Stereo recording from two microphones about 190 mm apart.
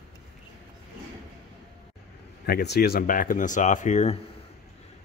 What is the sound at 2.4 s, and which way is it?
Speech, 55° left (ahead or behind).